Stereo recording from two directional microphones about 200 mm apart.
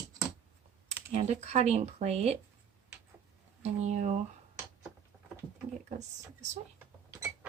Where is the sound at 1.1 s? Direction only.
35° right (ahead or behind).